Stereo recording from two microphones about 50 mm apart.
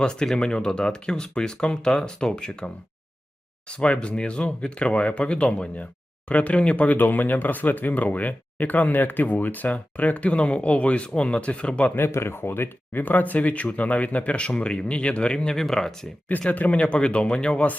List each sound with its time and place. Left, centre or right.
0.0 s speech: centre
6.9 s speech: left
11.9 s speech: left
15.5 s speech: centre
16.5 s speech: left